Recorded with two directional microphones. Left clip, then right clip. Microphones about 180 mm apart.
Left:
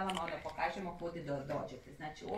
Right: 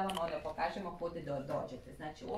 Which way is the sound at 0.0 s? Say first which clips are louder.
Right 2 dB; 15° right (ahead or behind).